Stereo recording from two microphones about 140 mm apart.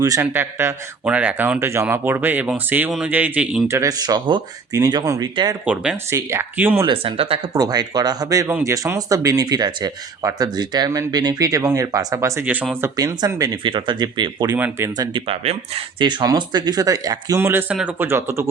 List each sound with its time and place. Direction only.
0.2 s speech: 15° right (ahead or behind)
3.7 s speech: 25° right (ahead or behind)
5.6 s speech: 5° right (ahead or behind)
6.1 s speech: 20° right (ahead or behind)
6.8 s speech: 40° right (ahead or behind)
7.5 s speech: 25° right (ahead or behind)
14.5 s speech: 20° right (ahead or behind)
15.3 s speech: 45° right (ahead or behind); by 18.4 s 20° right (ahead or behind)